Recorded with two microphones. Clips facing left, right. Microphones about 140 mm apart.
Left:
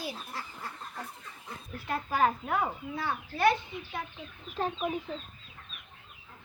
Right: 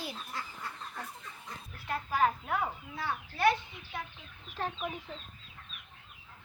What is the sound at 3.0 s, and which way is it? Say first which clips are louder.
Speech: left 2 dB; 55° left (ahead or behind).